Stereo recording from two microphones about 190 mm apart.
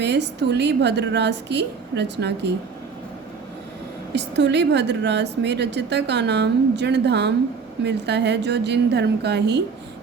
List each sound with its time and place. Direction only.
0.0 s a woman's voice: 65° right (ahead or behind)
4.1 s a woman's voice: 65° right (ahead or behind)